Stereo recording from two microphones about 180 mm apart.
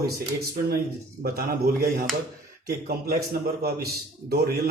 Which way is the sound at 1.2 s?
55° right (ahead or behind).